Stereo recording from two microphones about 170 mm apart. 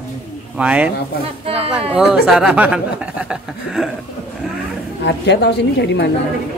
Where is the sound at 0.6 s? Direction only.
5° right (ahead or behind).